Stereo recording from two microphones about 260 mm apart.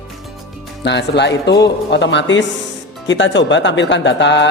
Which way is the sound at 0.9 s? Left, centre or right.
Left.